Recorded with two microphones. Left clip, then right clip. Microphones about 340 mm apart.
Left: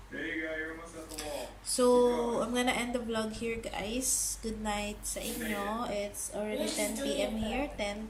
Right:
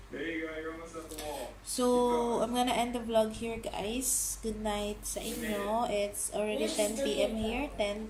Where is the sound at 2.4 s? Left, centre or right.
Centre.